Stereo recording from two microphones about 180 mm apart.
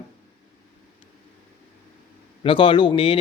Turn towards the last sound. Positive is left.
turn(degrees=30)  # may be behind; listen again after turning